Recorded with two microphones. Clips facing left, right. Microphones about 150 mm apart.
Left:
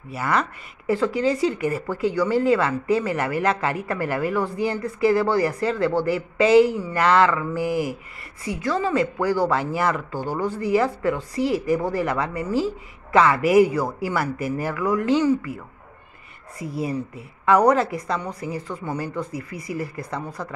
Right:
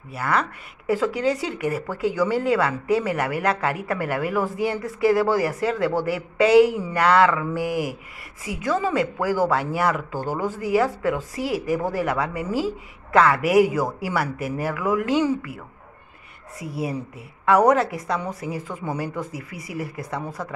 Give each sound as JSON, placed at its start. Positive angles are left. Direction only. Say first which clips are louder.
{"t": 0.1, "sound": "speech", "louder": "even", "side_deg": 0}